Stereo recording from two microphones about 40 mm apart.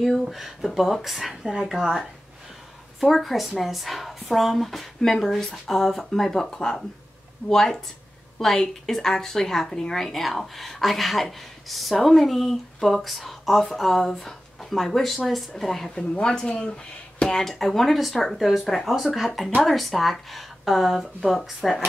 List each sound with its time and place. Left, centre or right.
0.2 s speech: centre
3.0 s a woman's voice: centre
15.9 s speech: left
17.5 s a woman's voice: centre